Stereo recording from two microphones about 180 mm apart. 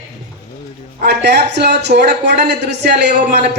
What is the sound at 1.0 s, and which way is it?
Speech, 70° right (ahead or behind).